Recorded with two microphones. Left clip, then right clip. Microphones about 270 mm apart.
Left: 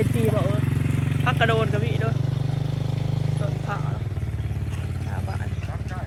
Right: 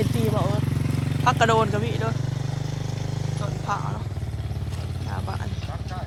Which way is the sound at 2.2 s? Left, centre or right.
Right.